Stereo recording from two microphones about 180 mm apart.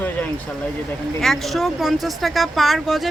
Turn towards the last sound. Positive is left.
turn(degrees=0)  # may be behind; listen again after turning